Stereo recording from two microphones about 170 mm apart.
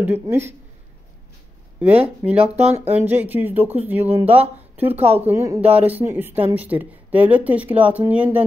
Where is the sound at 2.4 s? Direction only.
40° right (ahead or behind).